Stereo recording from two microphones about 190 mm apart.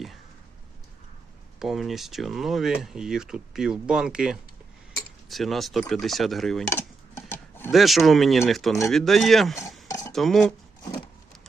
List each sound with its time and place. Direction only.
1.5 s speech: centre (ahead or behind)
6.7 s dishes: 10° left (ahead or behind)
7.7 s speech: centre (ahead or behind)